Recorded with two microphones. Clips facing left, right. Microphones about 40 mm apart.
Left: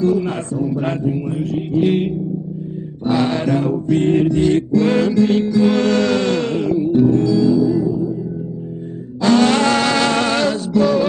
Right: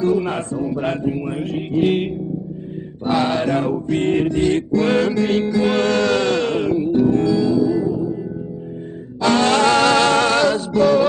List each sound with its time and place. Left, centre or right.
0.0 s speech: centre
1.4 s music: right
3.3 s speech: right
3.6 s music: centre; by 7.7 s right
9.2 s music: right